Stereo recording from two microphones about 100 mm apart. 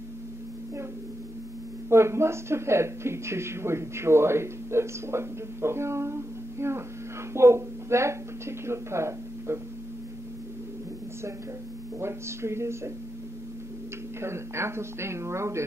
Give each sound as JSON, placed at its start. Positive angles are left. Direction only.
{"t": 1.9, "sound": "a man's voice", "side_deg": -25}
{"t": 12.0, "sound": "a man's voice", "side_deg": -25}
{"t": 14.2, "sound": "a man's voice", "side_deg": -25}